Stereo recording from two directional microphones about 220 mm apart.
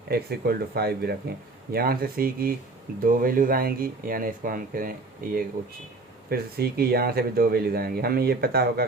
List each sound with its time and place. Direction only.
0.1 s speech: 45° right (ahead or behind)